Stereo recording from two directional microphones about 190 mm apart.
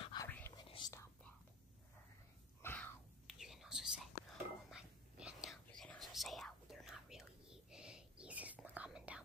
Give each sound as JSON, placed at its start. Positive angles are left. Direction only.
{"t": 0.0, "sound": "whispering", "side_deg": 25}
{"t": 2.6, "sound": "a sound", "side_deg": 10}
{"t": 3.3, "sound": "whispering", "side_deg": 0}